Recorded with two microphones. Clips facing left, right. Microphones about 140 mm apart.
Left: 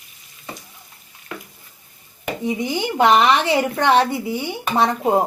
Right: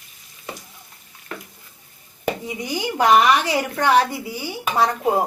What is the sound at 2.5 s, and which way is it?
A woman's voice, 25° left (ahead or behind).